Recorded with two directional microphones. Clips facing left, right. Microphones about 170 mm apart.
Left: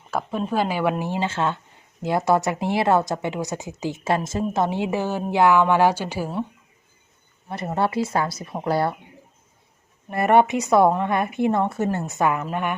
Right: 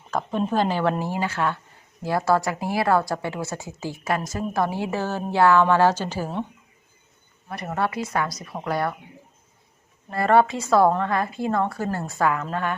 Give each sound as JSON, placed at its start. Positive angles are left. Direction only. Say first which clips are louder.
{"t": 0.1, "sound": "a woman's voice", "louder": "right 1 dB", "side_deg": 5}
{"t": 7.4, "sound": "a woman's voice", "louder": "left 3 dB", "side_deg": 25}
{"t": 10.1, "sound": "a woman's voice", "louder": "left 1 dB", "side_deg": 20}